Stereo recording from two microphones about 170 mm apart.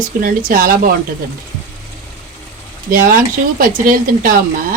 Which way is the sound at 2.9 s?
55° right (ahead or behind).